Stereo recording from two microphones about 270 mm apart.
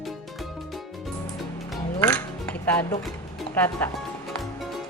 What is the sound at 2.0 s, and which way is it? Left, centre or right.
Music, centre.